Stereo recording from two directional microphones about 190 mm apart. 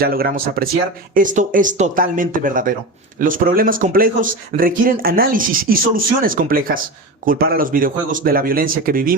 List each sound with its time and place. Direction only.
0.0 s speech: 50° right (ahead or behind)